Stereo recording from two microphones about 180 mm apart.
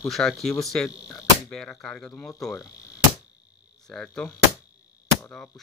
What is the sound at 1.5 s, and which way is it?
Speech, 5° left (ahead or behind).